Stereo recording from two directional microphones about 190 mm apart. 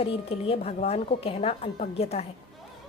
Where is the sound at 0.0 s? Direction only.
30° left (ahead or behind).